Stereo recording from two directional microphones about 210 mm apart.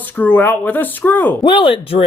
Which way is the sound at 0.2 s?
10° left (ahead or behind).